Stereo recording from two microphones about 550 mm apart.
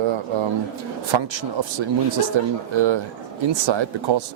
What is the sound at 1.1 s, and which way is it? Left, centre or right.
Speech, right.